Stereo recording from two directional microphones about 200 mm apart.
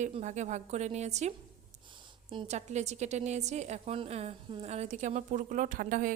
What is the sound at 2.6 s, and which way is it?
A woman's voice, 35° right (ahead or behind).